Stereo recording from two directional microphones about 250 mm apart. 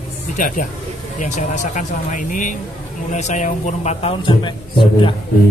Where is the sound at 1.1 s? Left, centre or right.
Left.